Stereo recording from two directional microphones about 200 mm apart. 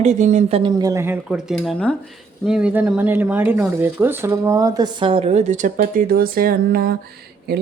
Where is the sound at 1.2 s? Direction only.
Centre (ahead or behind); by 7.0 s 50° right (ahead or behind).